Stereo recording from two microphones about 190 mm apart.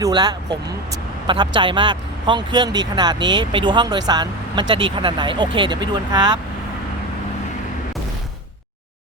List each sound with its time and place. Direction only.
0.0 s speech: 20° right (ahead or behind)